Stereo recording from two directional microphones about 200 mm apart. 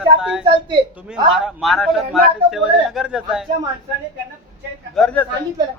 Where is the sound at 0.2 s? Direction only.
5° right (ahead or behind).